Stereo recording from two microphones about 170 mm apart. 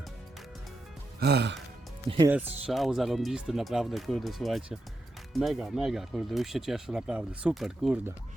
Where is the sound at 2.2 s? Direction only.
10° right (ahead or behind).